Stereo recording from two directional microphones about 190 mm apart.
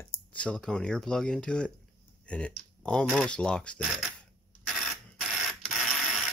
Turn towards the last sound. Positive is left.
turn(degrees=0)  # may be behind; listen again after turning